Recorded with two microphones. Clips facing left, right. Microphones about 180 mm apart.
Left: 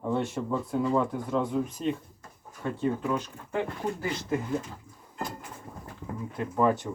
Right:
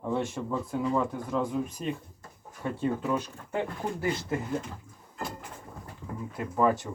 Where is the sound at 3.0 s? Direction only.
10° right (ahead or behind).